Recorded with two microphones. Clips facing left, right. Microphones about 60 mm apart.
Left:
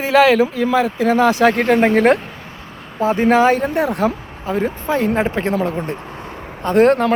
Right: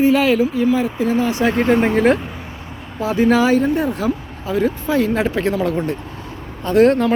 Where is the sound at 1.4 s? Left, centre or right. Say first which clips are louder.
Left 2 dB; left.